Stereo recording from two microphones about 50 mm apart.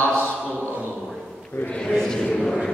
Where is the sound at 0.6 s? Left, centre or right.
Right.